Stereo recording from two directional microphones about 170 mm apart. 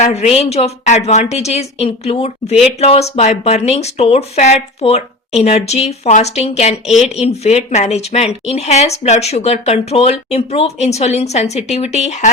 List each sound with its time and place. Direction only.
0.0 s a woman's voice: 40° left (ahead or behind)